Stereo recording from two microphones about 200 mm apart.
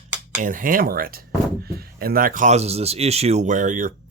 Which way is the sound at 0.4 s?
45° right (ahead or behind).